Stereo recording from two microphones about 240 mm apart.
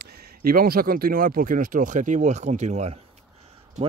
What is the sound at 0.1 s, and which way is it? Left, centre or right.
Speech, right.